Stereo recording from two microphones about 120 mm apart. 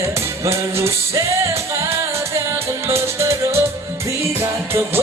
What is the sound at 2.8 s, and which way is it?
Music, 25° right (ahead or behind).